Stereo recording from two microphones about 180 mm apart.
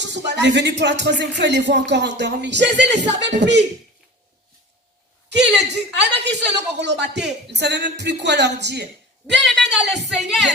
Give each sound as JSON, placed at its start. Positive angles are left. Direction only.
{"t": 0.0, "sound": "speech", "side_deg": -75}
{"t": 5.3, "sound": "speech", "side_deg": -70}
{"t": 9.4, "sound": "a woman's voice", "side_deg": 0}